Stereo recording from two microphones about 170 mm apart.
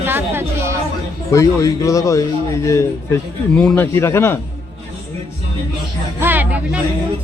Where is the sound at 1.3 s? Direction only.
20° left (ahead or behind).